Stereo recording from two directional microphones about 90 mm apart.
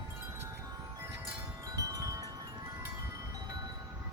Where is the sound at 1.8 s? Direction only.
40° right (ahead or behind).